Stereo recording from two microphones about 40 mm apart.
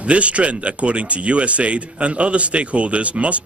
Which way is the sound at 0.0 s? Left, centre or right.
Right.